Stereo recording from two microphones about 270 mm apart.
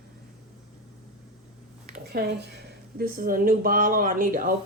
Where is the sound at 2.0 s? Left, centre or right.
Right.